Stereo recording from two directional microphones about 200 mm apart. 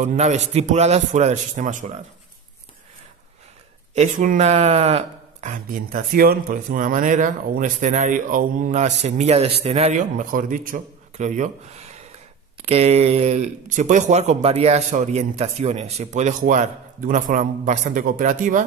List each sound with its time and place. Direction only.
0.0 s speech: 35° right (ahead or behind)
3.9 s speech: 40° right (ahead or behind)